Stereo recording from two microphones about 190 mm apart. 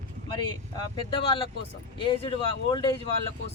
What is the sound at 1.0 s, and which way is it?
Speech, 25° left (ahead or behind).